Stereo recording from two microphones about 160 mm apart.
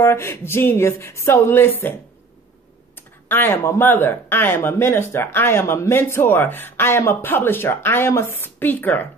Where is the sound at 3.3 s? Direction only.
15° left (ahead or behind).